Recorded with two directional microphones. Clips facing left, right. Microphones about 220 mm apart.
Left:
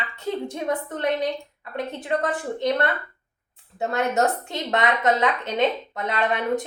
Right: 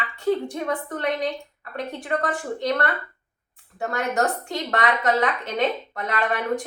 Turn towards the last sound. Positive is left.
turn(degrees=20)  # may be behind; listen again after turning